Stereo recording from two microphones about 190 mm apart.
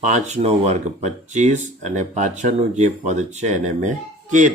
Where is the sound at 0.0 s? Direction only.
40° right (ahead or behind).